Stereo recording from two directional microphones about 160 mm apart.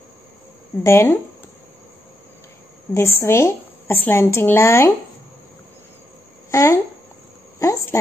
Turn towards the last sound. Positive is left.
turn(degrees=20)  # may be behind; listen again after turning